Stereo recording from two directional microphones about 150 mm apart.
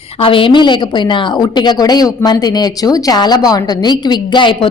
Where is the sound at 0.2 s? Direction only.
35° left (ahead or behind).